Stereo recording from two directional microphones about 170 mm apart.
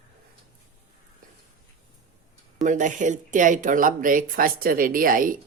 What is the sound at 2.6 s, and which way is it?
Speech, 45° right (ahead or behind).